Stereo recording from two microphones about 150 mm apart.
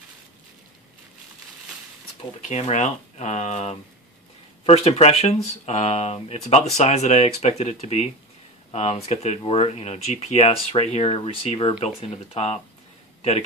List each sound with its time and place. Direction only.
2.4 s speech: 50° left (ahead or behind)